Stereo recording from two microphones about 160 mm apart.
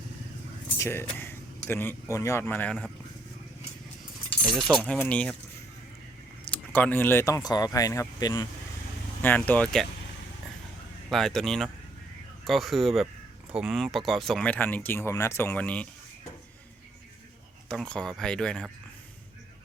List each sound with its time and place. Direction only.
0.8 s speech: 15° left (ahead or behind)
2.4 s speech: 10° left (ahead or behind)
4.4 s speech: centre (ahead or behind)
6.4 s speech: 10° left (ahead or behind)
9.2 s speech: 10° left (ahead or behind)
11.1 s speech: centre (ahead or behind)
17.7 s speech: 5° left (ahead or behind)